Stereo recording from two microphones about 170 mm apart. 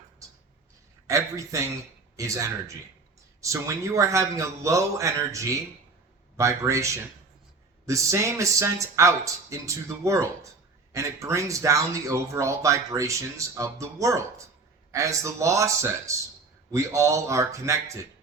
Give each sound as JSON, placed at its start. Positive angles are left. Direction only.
{"t": 1.0, "sound": "speech", "side_deg": -20}